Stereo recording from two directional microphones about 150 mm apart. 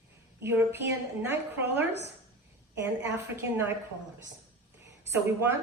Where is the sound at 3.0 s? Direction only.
15° right (ahead or behind).